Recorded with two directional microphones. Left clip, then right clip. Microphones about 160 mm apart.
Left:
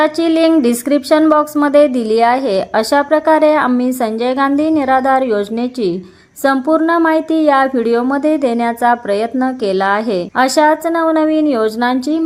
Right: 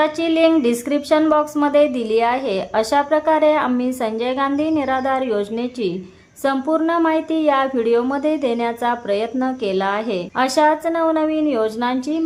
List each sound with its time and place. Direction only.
0.0 s speech: 35° left (ahead or behind)